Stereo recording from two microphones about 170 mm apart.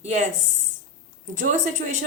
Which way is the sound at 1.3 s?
45° right (ahead or behind).